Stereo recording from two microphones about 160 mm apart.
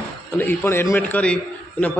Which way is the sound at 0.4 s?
10° left (ahead or behind).